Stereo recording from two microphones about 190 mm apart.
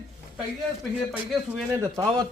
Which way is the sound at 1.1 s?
5° right (ahead or behind).